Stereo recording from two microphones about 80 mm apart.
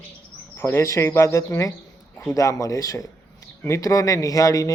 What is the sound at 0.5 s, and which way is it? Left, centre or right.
Speech, left.